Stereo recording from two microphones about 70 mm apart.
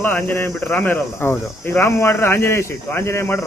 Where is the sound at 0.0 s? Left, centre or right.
Left.